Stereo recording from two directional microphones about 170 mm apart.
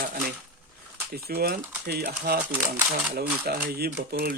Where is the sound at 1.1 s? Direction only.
65° right (ahead or behind).